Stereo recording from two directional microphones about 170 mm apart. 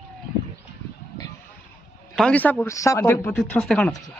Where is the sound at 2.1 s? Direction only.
5° left (ahead or behind).